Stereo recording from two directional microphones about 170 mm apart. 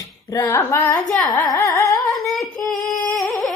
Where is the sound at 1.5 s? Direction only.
20° left (ahead or behind).